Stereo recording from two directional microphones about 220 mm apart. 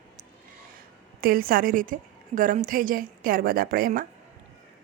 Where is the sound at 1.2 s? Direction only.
40° right (ahead or behind).